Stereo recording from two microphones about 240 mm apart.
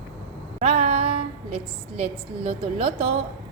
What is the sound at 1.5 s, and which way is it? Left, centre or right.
A woman's voice, right.